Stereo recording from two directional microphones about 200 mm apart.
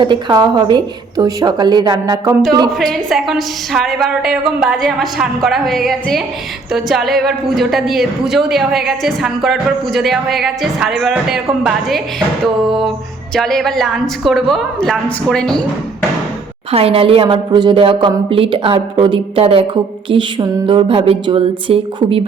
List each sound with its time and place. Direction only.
0.0 s a woman's voice: 25° right (ahead or behind)
2.7 s a woman's voice: centre (ahead or behind)
13.3 s a woman's voice: centre (ahead or behind)
16.7 s a woman's voice: 30° right (ahead or behind)